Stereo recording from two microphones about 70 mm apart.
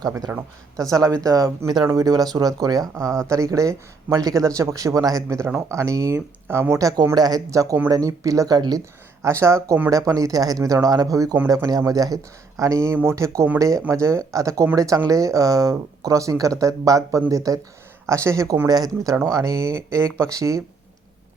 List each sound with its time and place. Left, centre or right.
0.3 s speech: right
0.8 s speech: right
5.7 s speech: right
9.2 s speech: right
9.9 s speech: right
18.0 s speech: right
18.7 s speech: right
19.2 s speech: right